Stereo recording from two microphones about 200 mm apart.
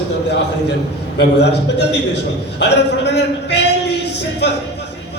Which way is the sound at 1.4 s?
60° left (ahead or behind).